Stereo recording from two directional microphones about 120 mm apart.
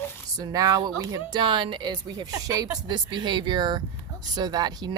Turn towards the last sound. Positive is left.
turn(degrees=-35)  # may be behind; listen again after turning